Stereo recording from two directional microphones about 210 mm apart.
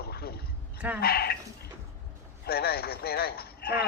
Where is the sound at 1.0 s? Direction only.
50° left (ahead or behind).